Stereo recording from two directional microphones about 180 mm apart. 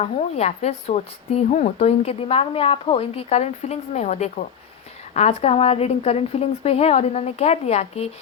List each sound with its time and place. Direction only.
0.0 s speech: 35° left (ahead or behind)